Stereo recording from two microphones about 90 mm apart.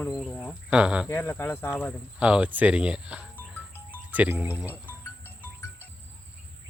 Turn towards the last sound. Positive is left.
turn(degrees=25)  # may be behind; listen again after turning